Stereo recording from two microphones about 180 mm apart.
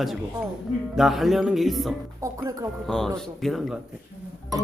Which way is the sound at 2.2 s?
15° right (ahead or behind).